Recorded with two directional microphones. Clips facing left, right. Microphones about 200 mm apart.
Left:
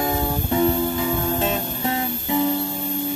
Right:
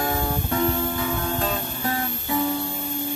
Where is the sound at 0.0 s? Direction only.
20° left (ahead or behind).